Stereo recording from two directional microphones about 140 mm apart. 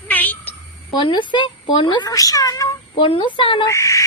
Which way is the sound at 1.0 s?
35° left (ahead or behind).